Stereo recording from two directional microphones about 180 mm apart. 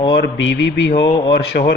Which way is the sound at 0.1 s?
85° left.